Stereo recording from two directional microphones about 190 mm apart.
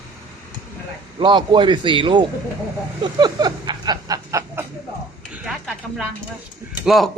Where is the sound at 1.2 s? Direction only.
25° right (ahead or behind).